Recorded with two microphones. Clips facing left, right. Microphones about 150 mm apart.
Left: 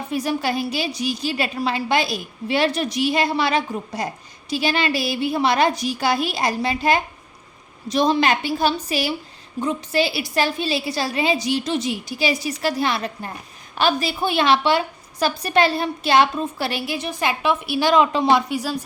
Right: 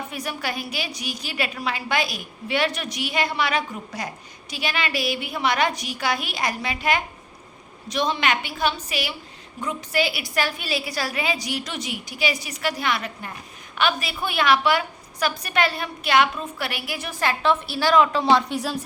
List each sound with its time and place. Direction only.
0.1 s a woman's voice: 30° left (ahead or behind); by 18.8 s centre (ahead or behind)